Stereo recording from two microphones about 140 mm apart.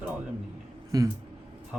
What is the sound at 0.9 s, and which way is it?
Speech, 25° right (ahead or behind).